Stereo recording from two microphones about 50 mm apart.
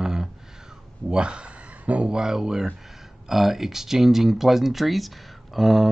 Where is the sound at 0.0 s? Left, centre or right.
Centre.